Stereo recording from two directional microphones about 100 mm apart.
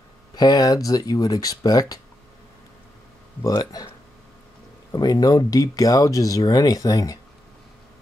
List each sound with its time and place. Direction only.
0.4 s speech: 40° left (ahead or behind)
3.4 s speech: 35° left (ahead or behind)
4.9 s speech: 40° left (ahead or behind)